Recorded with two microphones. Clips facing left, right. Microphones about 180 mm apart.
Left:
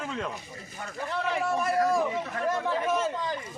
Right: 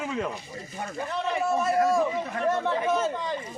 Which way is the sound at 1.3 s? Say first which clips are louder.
Right 3 dB; 25° right (ahead or behind).